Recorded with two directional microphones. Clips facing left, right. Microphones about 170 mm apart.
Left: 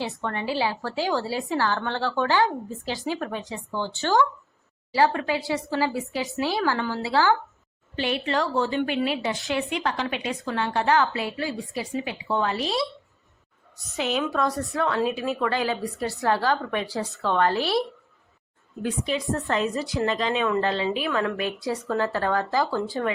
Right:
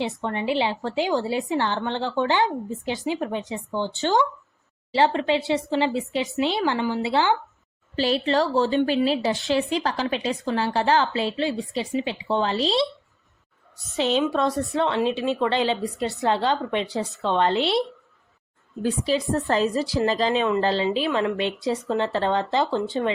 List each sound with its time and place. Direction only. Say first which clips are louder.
0.0 s a woman's voice: right 3 dB; 20° right (ahead or behind)
7.9 s a woman's voice: right 4 dB; 30° right (ahead or behind)
13.9 s a woman's voice: right 4 dB; 30° right (ahead or behind)